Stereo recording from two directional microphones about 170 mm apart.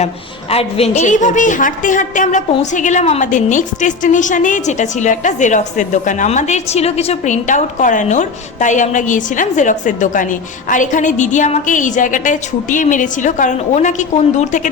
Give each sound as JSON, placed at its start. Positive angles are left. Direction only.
{"t": 0.5, "sound": "a woman's voice", "side_deg": 40}